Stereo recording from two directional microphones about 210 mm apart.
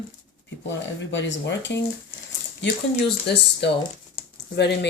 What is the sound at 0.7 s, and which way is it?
Speech, 60° left (ahead or behind).